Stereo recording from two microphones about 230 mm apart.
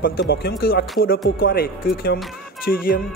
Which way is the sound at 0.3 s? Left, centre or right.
Left.